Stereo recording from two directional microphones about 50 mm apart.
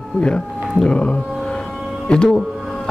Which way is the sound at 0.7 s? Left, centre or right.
Left.